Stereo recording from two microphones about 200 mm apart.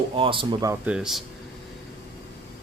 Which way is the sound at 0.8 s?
5° right (ahead or behind).